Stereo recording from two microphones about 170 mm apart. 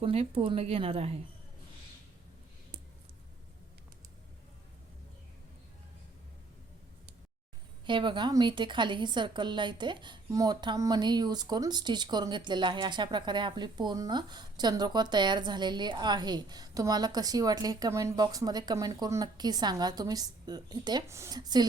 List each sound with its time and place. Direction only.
0.0 s a woman's voice: 35° right (ahead or behind)
7.9 s a woman's voice: 30° right (ahead or behind)